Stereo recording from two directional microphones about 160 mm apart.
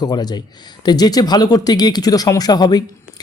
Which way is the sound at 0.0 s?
25° left (ahead or behind).